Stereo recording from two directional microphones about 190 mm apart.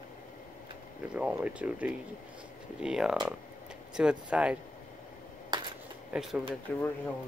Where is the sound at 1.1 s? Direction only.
5° right (ahead or behind).